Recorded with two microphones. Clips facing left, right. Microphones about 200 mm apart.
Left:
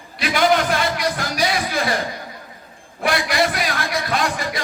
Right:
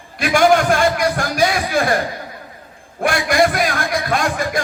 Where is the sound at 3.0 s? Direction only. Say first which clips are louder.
Right 4 dB; 50° right (ahead or behind).